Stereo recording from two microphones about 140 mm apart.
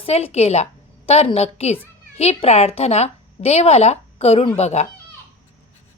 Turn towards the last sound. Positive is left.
turn(degrees=50)  # may be behind; listen again after turning